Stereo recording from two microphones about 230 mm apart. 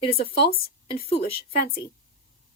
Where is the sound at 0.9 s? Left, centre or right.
Left.